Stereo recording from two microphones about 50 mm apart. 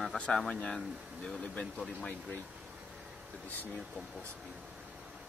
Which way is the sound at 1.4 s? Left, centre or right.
Left.